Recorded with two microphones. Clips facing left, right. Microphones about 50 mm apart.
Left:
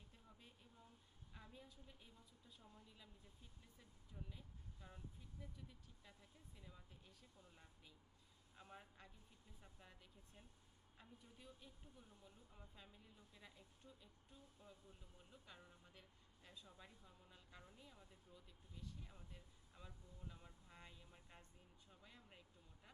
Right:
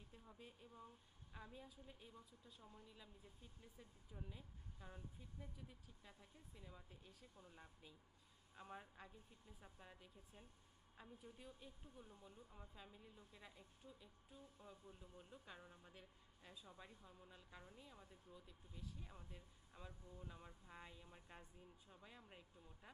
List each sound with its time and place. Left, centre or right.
0.3 s speech: centre
14.6 s speech: centre